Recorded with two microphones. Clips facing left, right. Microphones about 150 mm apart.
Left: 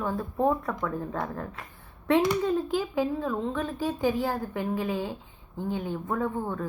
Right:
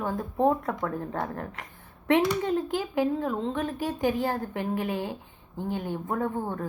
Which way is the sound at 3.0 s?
50° right (ahead or behind).